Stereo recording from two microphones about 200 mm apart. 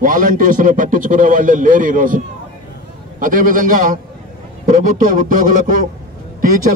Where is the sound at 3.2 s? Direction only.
45° right (ahead or behind).